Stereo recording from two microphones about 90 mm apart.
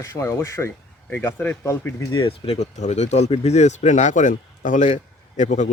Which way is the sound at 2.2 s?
90° left.